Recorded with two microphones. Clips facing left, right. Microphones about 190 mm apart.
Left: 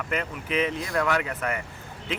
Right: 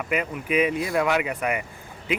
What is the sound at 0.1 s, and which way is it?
Speech, 10° right (ahead or behind).